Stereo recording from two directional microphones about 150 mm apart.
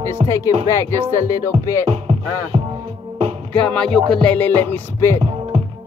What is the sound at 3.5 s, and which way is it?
Music, 5° left (ahead or behind).